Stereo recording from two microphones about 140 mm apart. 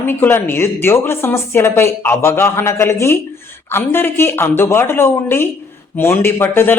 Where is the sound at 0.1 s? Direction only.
15° left (ahead or behind).